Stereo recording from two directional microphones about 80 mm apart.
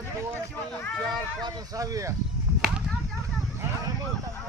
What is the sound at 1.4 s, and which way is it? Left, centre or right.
Speech, right.